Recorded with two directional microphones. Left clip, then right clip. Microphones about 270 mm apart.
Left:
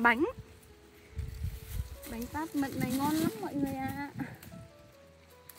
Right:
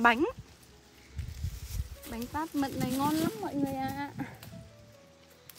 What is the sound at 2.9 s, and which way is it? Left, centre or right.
Speech, centre.